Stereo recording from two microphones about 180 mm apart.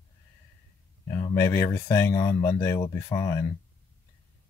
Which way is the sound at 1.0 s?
15° left (ahead or behind).